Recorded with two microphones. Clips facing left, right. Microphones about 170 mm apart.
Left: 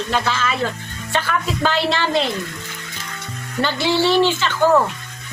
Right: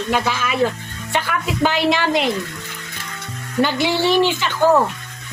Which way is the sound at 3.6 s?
15° right (ahead or behind).